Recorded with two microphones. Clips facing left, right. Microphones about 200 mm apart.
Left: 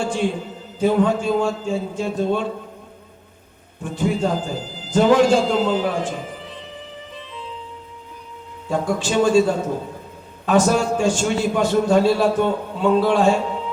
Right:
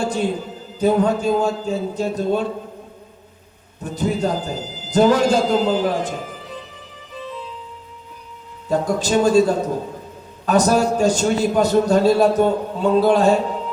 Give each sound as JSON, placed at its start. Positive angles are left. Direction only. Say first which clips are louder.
{"t": 0.0, "sound": "a sound", "louder": "right 1 dB", "side_deg": -40}
{"t": 0.8, "sound": "a man's voice", "louder": "right 1 dB", "side_deg": -40}
{"t": 3.8, "sound": "a man's voice", "louder": "even", "side_deg": -40}
{"t": 8.7, "sound": "a man's voice", "louder": "right 2 dB", "side_deg": -40}